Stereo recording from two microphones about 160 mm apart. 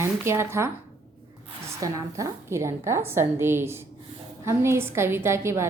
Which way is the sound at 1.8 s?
20° right (ahead or behind).